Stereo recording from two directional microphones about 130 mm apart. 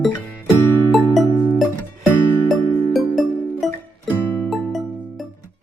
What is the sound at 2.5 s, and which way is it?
Music, centre (ahead or behind).